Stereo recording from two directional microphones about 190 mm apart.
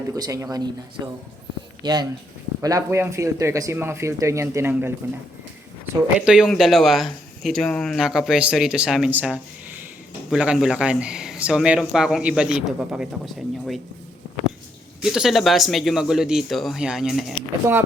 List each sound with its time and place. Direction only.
0.1 s speech: 15° right (ahead or behind)
15.0 s speech: centre (ahead or behind)